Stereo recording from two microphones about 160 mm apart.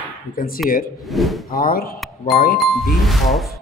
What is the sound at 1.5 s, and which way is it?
A man's voice, 65° left (ahead or behind).